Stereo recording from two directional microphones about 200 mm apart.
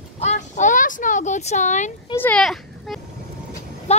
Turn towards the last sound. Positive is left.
turn(degrees=30)  # may be behind; listen again after turning